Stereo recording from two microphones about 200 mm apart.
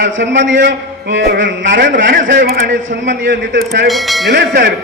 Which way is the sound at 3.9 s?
Centre (ahead or behind).